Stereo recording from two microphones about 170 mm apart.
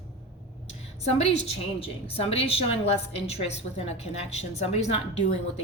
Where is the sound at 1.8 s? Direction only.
35° left (ahead or behind).